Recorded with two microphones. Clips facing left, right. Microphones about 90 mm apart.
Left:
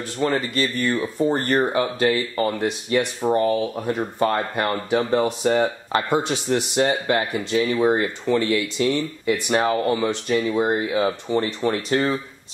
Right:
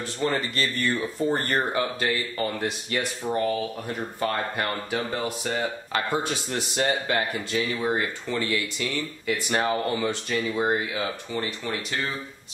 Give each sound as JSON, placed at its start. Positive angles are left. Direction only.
{"t": 0.2, "sound": "speech", "side_deg": 20}
{"t": 5.9, "sound": "speech", "side_deg": 20}